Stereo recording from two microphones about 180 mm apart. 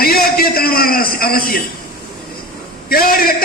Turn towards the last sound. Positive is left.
turn(degrees=55)  # may be behind; listen again after turning